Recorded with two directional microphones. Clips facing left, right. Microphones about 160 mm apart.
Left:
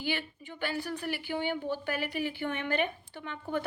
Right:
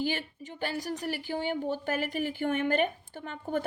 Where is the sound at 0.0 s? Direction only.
40° right (ahead or behind).